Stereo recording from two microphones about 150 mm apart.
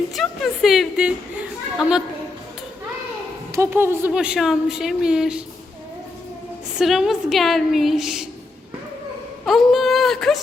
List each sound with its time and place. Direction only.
0.2 s a woman's voice: centre (ahead or behind)
3.5 s a woman's voice: 15° right (ahead or behind)
6.7 s a woman's voice: centre (ahead or behind)
9.5 s speech: centre (ahead or behind)